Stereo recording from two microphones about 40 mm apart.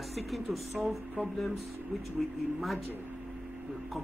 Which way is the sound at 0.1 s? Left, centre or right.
Centre.